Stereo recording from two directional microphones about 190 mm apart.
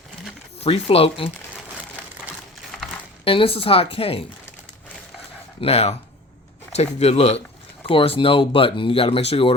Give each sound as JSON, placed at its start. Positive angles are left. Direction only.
{"t": 0.6, "sound": "speech", "side_deg": 30}
{"t": 3.2, "sound": "speech", "side_deg": 30}
{"t": 5.5, "sound": "speech", "side_deg": 30}